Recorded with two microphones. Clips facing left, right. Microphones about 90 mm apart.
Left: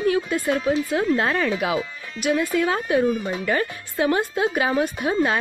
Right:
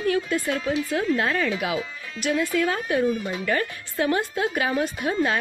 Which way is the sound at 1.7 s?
15° left (ahead or behind).